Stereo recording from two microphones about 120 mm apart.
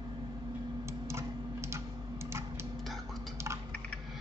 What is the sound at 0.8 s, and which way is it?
Typing, 20° right (ahead or behind).